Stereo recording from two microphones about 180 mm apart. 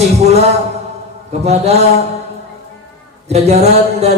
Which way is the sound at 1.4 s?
35° right (ahead or behind).